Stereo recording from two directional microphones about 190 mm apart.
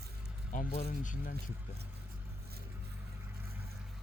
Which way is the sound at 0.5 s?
40° left (ahead or behind).